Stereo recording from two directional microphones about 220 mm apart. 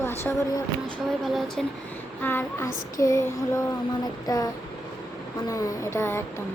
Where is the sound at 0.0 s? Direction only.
10° left (ahead or behind).